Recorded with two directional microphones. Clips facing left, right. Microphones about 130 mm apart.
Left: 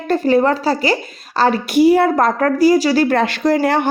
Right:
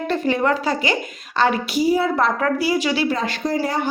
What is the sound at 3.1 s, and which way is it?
Speech, 70° left (ahead or behind).